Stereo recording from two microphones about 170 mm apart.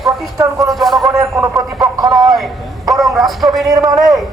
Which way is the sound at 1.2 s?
15° right (ahead or behind).